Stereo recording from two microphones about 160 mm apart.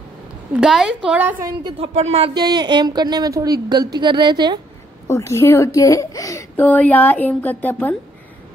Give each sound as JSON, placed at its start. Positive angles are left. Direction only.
{"t": 0.6, "sound": "a woman's voice", "side_deg": -5}
{"t": 1.6, "sound": "a woman's voice", "side_deg": -25}
{"t": 2.0, "sound": "speech", "side_deg": -40}
{"t": 2.3, "sound": "a woman's voice", "side_deg": -25}
{"t": 5.0, "sound": "a child's voice", "side_deg": 15}